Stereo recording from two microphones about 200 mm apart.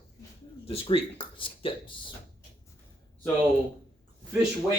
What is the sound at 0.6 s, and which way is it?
Speech, 30° left (ahead or behind).